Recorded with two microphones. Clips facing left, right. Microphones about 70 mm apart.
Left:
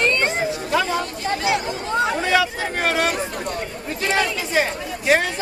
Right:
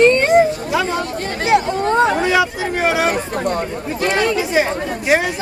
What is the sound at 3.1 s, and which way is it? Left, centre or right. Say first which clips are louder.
Speech: right 6 dB; right.